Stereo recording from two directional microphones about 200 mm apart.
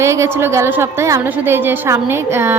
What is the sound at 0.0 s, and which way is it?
A woman's voice, 15° right (ahead or behind).